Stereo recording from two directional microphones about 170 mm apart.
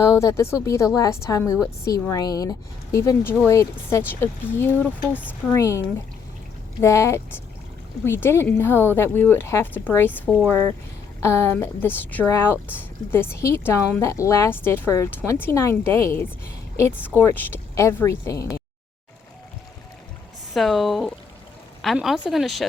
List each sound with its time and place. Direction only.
0.0 s speech: 20° left (ahead or behind)
6.8 s speech: 15° left (ahead or behind)
20.5 s a woman's voice: centre (ahead or behind)